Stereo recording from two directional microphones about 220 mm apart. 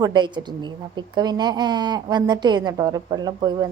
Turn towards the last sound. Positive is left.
turn(degrees=-20)  # may be behind; listen again after turning